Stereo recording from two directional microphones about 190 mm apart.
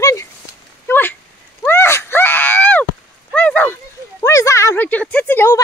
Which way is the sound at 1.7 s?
15° left (ahead or behind).